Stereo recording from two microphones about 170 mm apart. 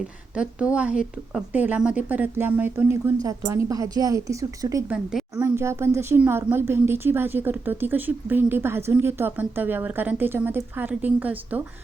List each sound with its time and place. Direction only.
0.3 s a woman's voice: 5° right (ahead or behind)